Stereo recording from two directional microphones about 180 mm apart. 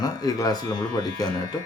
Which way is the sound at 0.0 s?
20° left (ahead or behind).